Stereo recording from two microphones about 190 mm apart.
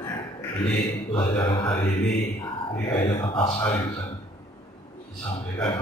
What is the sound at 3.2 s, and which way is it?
Speech, 25° left (ahead or behind).